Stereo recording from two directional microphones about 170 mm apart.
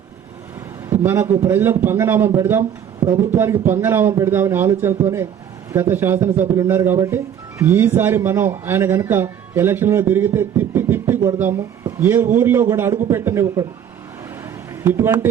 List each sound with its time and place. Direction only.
1.0 s speech: 15° right (ahead or behind)
14.8 s speech: 10° right (ahead or behind)